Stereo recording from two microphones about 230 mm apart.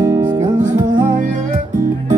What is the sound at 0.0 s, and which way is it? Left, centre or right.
Music, centre.